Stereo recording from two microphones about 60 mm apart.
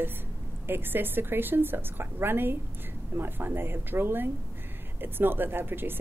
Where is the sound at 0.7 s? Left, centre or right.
Right.